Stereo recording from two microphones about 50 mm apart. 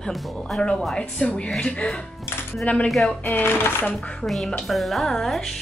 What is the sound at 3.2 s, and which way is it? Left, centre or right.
Speech, left.